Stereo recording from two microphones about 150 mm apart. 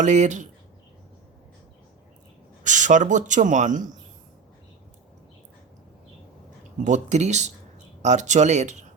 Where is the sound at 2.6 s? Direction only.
55° right (ahead or behind).